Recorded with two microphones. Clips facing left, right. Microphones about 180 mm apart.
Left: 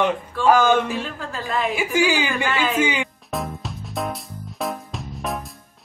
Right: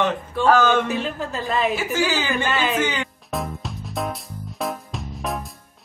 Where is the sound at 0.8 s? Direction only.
20° right (ahead or behind).